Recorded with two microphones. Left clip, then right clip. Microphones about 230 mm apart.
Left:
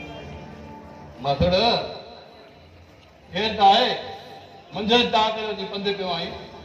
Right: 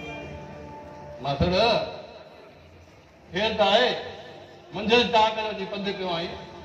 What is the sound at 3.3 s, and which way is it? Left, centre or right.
A man's voice, left.